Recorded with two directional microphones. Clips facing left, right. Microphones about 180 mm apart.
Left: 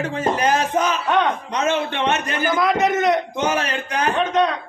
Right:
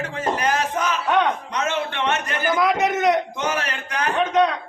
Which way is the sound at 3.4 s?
20° left (ahead or behind).